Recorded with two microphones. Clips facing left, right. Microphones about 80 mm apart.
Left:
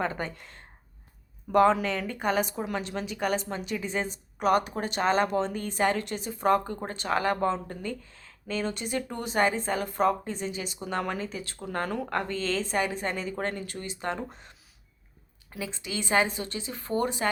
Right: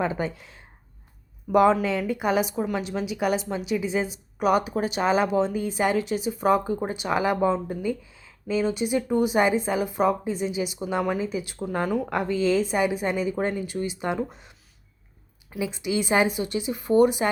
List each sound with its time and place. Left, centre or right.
0.0 s speech: centre